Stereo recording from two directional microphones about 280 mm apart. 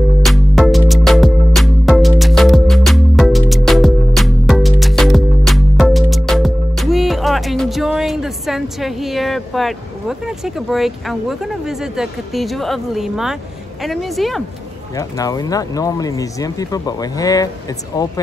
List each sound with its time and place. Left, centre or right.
0.2 s music: centre
13.8 s a woman's voice: centre
15.0 s speech: centre